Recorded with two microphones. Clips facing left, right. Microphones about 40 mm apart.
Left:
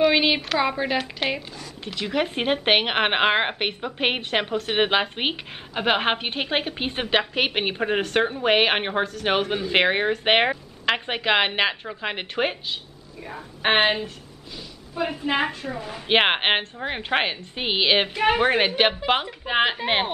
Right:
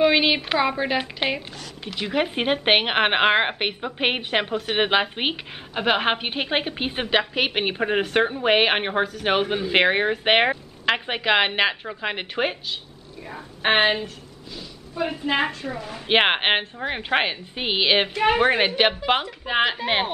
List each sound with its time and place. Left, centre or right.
0.0 s a woman's voice: centre
0.9 s speech: centre